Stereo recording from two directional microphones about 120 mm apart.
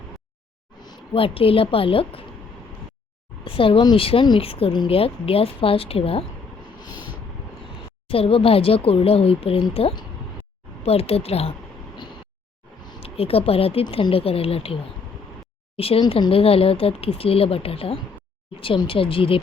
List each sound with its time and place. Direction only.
1.1 s speech: 50° left (ahead or behind)
3.4 s a sound: 50° left (ahead or behind)
3.9 s speech: 50° left (ahead or behind)
6.9 s vehicle: 15° right (ahead or behind)
8.0 s speech: 50° left (ahead or behind)
10.8 s speech: 55° left (ahead or behind)
13.0 s speech: 55° left (ahead or behind)
15.8 s speech: 55° left (ahead or behind)